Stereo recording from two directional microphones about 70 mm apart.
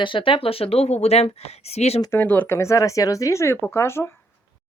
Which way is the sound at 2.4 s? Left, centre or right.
Left.